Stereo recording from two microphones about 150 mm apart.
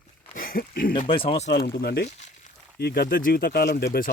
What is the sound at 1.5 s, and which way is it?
Speech, 90° left.